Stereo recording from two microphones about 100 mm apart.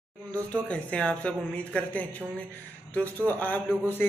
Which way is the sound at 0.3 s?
15° left (ahead or behind).